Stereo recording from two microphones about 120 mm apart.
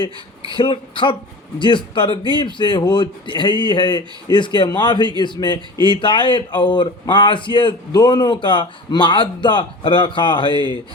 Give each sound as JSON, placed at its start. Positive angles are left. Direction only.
{"t": 0.5, "sound": "speech", "side_deg": 45}